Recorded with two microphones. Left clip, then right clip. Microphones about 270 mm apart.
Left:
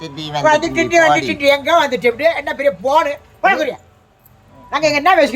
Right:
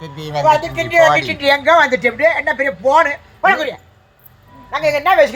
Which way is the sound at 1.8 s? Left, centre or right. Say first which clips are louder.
Right 1 dB; centre.